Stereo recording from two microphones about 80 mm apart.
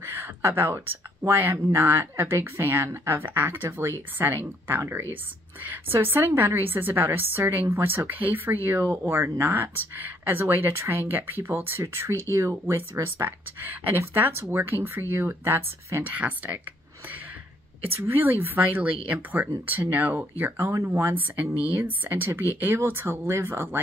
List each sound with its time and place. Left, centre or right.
0.0 s speech: right
4.6 s speech: right
17.9 s speech: right